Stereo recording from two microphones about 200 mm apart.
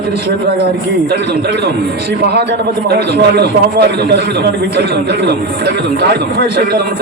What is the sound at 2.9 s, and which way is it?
A man's voice, 55° right (ahead or behind).